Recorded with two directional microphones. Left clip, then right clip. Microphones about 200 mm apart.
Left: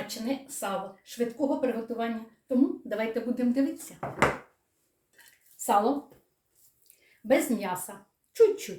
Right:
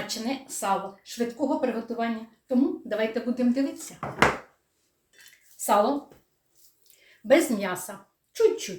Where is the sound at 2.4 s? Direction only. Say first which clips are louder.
Right 1 dB; 5° left (ahead or behind).